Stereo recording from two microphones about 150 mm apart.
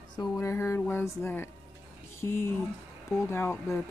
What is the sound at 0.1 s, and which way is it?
Speech, 25° left (ahead or behind).